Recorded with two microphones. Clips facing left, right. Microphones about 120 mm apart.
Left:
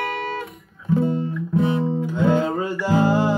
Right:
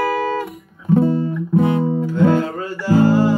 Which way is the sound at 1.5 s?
55° right (ahead or behind).